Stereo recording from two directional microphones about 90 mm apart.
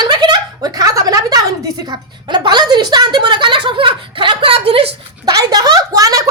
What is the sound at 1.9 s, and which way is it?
A woman's voice, 55° right (ahead or behind).